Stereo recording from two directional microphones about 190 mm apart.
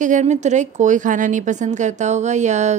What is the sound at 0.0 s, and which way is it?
Speech, 40° right (ahead or behind).